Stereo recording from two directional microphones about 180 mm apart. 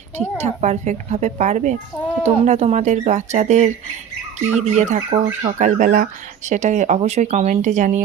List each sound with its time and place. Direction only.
0.2 s speech: 40° right (ahead or behind)